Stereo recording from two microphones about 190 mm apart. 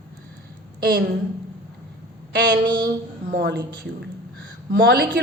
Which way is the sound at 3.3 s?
60° right (ahead or behind).